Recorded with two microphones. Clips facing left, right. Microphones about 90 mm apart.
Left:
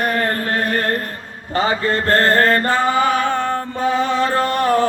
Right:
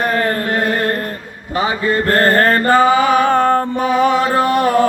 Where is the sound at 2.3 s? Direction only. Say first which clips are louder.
Right 2 dB; 50° right (ahead or behind).